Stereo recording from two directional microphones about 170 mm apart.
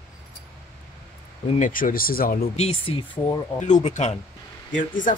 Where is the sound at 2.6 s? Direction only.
35° left (ahead or behind).